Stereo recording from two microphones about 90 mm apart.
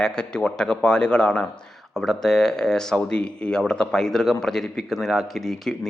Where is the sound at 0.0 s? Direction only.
10° left (ahead or behind).